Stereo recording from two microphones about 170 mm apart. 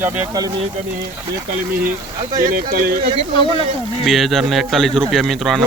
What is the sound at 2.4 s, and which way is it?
Speech, 60° right (ahead or behind).